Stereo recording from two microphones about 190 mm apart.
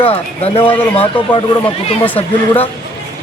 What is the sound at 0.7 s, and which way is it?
A man's voice, 10° left (ahead or behind).